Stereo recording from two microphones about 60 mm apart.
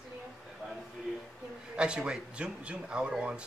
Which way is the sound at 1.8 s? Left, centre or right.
Centre.